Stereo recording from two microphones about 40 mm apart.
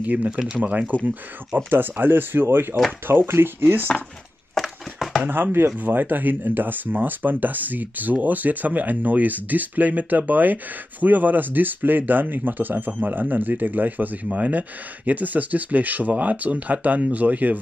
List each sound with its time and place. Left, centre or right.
0.0 s speech: right
1.7 s speech: right
4.6 s a sound: centre
5.2 s speech: right
5.8 s speech: right